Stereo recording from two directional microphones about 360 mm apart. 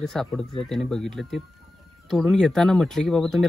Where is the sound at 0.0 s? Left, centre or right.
Centre.